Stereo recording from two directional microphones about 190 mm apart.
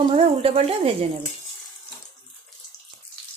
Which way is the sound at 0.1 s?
30° right (ahead or behind).